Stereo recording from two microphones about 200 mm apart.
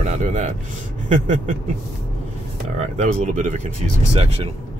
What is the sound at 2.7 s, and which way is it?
Speech, 40° right (ahead or behind).